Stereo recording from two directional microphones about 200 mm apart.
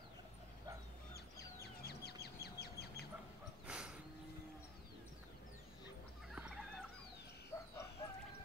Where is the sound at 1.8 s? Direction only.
55° left (ahead or behind).